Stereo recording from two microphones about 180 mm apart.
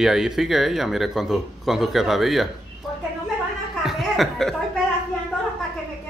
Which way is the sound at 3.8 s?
Centre (ahead or behind).